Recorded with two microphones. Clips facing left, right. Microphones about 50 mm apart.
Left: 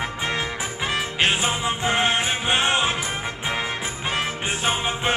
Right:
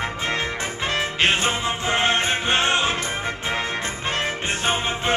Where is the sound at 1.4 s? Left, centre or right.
Centre.